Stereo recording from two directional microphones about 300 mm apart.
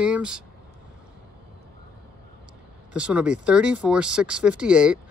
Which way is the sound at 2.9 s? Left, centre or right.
Centre.